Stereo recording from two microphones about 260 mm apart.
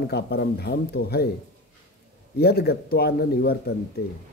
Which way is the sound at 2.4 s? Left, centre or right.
Left.